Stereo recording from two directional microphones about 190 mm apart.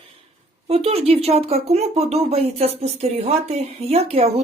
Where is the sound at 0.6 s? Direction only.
30° right (ahead or behind).